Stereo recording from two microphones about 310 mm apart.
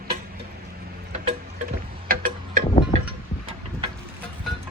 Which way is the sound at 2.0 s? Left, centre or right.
Right.